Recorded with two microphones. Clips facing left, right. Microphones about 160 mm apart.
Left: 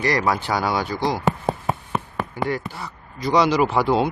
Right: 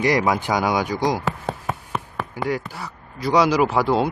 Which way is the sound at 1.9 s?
Centre (ahead or behind).